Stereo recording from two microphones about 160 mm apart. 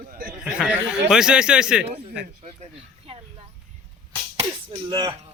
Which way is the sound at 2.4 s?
40° right (ahead or behind).